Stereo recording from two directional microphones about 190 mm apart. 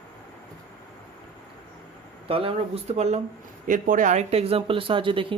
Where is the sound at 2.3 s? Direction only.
30° right (ahead or behind).